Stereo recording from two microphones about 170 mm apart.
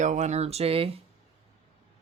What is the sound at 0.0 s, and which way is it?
Speech, 45° right (ahead or behind).